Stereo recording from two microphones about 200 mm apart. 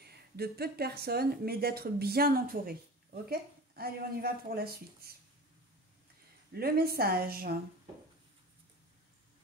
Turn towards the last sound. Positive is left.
turn(degrees=-50)  # may be behind; listen again after turning